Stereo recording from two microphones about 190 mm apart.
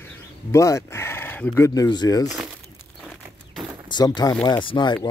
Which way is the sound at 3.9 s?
25° left (ahead or behind).